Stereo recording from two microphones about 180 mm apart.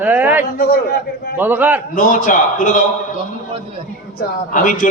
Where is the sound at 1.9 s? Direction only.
50° left (ahead or behind).